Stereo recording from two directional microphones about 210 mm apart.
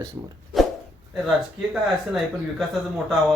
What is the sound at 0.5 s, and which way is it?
Zipper, centre (ahead or behind).